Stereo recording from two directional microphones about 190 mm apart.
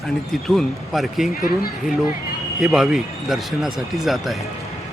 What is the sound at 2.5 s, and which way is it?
Speech, centre (ahead or behind).